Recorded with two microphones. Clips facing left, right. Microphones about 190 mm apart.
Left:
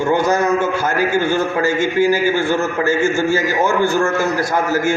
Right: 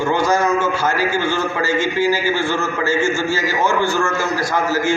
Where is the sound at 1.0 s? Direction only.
55° left (ahead or behind).